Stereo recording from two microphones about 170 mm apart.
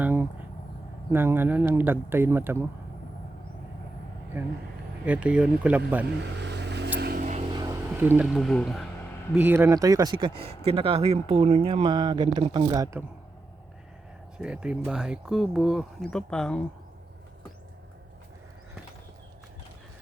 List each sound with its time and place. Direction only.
0.0 s vehicle: 10° right (ahead or behind)
1.1 s speech: 15° right (ahead or behind)
5.0 s speech: 5° right (ahead or behind)
6.1 s vehicle: 85° right; by 7.3 s 65° right (ahead or behind)
7.9 s speech: 10° right (ahead or behind)
9.4 s speech: 15° right (ahead or behind)
14.3 s speech: 5° right (ahead or behind)